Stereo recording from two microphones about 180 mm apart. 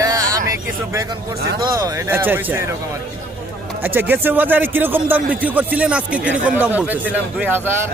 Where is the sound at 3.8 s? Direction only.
10° right (ahead or behind).